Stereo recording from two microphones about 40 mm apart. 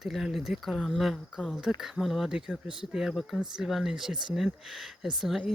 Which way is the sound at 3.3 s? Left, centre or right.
Centre.